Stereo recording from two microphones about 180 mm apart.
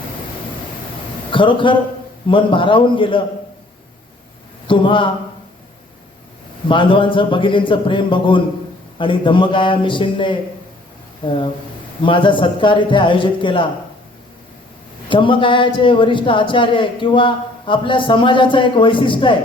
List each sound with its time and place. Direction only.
1.3 s a man's voice: 25° left (ahead or behind)
4.6 s a man's voice: 30° left (ahead or behind)
6.7 s a man's voice: 30° left (ahead or behind)
15.1 s a man's voice: 30° left (ahead or behind)